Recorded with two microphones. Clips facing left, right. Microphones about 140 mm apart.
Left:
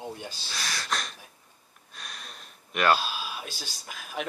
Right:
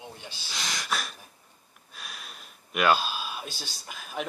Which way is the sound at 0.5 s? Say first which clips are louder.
Right 1 dB; 20° right (ahead or behind).